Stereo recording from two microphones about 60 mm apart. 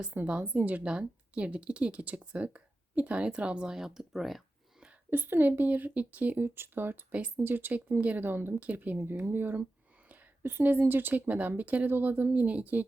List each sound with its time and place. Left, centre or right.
0.0 s a woman's voice: right; by 4.4 s centre
5.1 s a woman's voice: right
6.4 s a woman's voice: right
9.0 s speech: right
10.6 s a woman's voice: right